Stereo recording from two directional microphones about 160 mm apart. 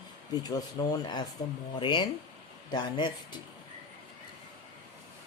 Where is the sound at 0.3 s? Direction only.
25° left (ahead or behind).